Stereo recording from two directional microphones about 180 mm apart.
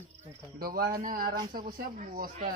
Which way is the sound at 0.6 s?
55° right (ahead or behind).